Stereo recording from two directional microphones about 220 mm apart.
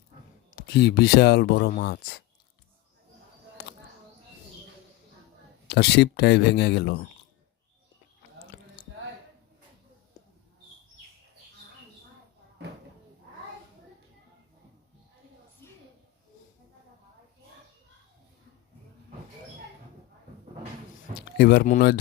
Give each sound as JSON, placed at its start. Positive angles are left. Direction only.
{"t": 0.5, "sound": "speech", "side_deg": 45}
{"t": 5.6, "sound": "speech", "side_deg": 50}
{"t": 15.6, "sound": "a sound", "side_deg": 10}
{"t": 21.3, "sound": "speech", "side_deg": 45}